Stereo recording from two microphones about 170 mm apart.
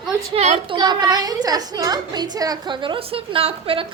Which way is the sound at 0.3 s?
35° right (ahead or behind).